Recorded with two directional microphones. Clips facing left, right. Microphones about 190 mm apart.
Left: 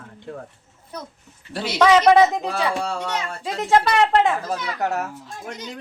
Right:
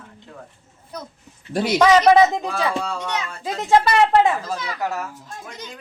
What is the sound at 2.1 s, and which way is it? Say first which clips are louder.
Speech: right 1 dB; centre (ahead or behind).